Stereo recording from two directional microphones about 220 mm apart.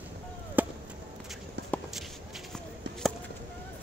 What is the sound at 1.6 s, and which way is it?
Walk, 50° right (ahead or behind).